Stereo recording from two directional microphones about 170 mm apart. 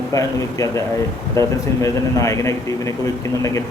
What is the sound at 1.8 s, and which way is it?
A man's voice, 20° left (ahead or behind).